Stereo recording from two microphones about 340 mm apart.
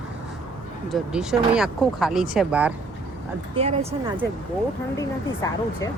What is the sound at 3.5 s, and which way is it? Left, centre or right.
Speech, centre.